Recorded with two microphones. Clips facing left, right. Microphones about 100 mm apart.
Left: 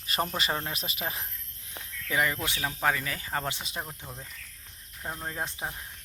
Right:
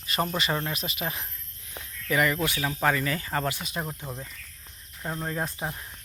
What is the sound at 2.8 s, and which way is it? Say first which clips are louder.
Speech: right 3 dB; 5° left (ahead or behind).